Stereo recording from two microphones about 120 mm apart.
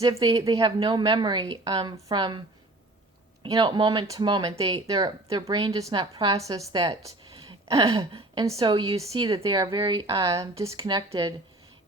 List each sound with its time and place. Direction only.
0.0 s a woman's voice: 30° right (ahead or behind)
0.3 s a woman's voice: 45° right (ahead or behind)
3.5 s a woman's voice: 35° right (ahead or behind)
4.5 s speech: 50° right (ahead or behind)
4.9 s a woman's voice: 30° right (ahead or behind)
7.0 s a sound: 30° right (ahead or behind)
7.9 s a woman's voice: 40° right (ahead or behind)
10.8 s a woman's voice: 40° right (ahead or behind)